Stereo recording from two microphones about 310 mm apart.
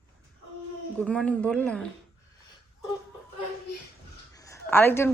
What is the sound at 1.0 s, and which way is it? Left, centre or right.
Speech, centre.